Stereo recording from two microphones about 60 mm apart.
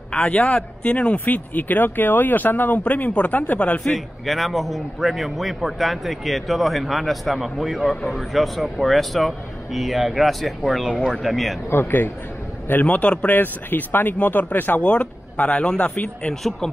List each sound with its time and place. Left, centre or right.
0.1 s speech: left
3.9 s a man's voice: centre
11.7 s speech: left
12.8 s speech: left
14.8 s speech: left